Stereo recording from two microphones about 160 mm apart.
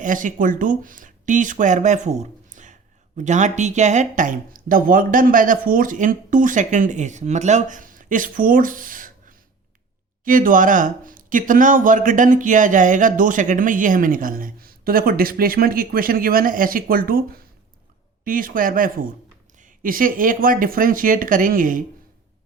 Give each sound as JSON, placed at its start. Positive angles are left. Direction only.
{"t": 0.0, "sound": "speech", "side_deg": -55}